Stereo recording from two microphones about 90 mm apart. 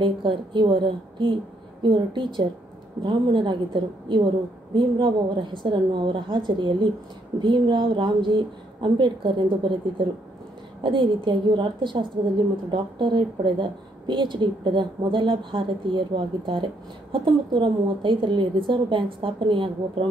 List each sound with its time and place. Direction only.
0.0 s a woman's voice: 65° right (ahead or behind)